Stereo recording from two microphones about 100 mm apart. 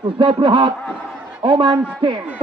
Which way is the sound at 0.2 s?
60° right (ahead or behind).